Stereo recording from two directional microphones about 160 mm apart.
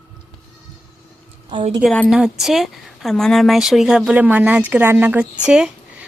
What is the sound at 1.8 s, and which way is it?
A woman's voice, centre (ahead or behind).